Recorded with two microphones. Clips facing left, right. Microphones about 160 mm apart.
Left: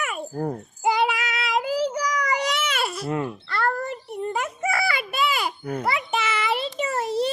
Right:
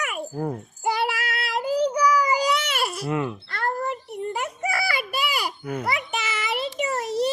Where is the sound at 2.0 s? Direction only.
80° left.